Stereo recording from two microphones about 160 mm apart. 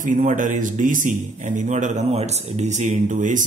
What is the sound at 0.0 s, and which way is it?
A man's voice, 55° right (ahead or behind).